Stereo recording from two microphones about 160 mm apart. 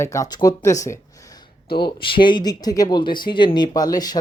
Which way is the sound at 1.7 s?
30° left (ahead or behind).